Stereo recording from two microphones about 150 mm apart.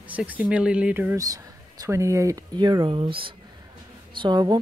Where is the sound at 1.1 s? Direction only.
20° right (ahead or behind).